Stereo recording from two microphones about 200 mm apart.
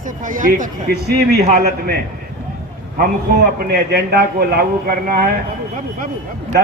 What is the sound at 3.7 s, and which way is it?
A man's voice, 50° right (ahead or behind).